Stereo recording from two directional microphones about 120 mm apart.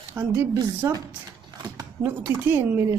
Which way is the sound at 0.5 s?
30° right (ahead or behind).